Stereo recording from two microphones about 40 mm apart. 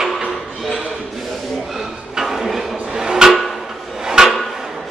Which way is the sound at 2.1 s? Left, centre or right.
Centre.